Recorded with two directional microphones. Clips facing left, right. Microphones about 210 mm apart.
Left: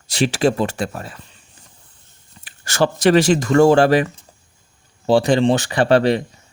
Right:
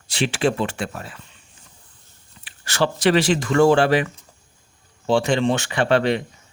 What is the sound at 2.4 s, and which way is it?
Speech, 45° left (ahead or behind).